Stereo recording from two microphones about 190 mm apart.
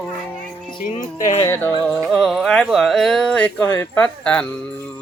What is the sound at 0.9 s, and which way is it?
Speech, 40° left (ahead or behind).